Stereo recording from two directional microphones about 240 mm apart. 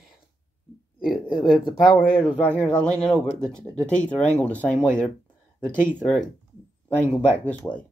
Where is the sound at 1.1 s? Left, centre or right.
Centre.